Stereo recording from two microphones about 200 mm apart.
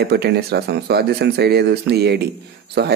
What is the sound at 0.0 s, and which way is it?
A man's voice, 55° right (ahead or behind).